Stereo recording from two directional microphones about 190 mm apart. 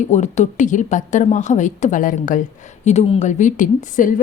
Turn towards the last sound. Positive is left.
turn(degrees=45)  # may be behind; listen again after turning